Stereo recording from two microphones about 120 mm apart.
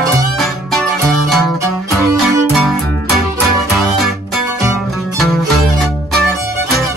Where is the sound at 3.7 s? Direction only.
Centre (ahead or behind).